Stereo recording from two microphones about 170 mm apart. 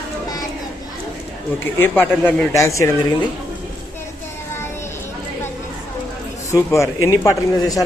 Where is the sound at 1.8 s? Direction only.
10° left (ahead or behind).